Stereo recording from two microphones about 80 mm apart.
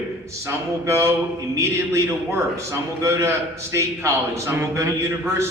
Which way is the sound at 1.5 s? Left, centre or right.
Right.